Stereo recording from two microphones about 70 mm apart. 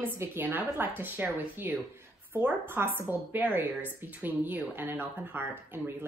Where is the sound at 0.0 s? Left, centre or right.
Right.